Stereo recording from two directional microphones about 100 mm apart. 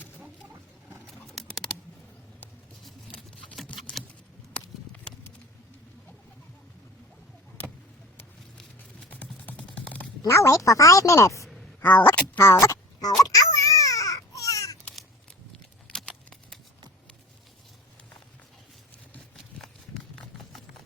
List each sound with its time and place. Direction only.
0.9 s bird: centre (ahead or behind)
3.7 s typing: 15° left (ahead or behind)
4.5 s a sound: 10° left (ahead or behind)
9.1 s typing: 15° left (ahead or behind)
10.2 s speech: 30° left (ahead or behind)
11.8 s speech: 15° left (ahead or behind)
12.4 s babbling: 30° left (ahead or behind)
15.9 s a sound: 5° left (ahead or behind)
19.6 s a sound: 5° left (ahead or behind)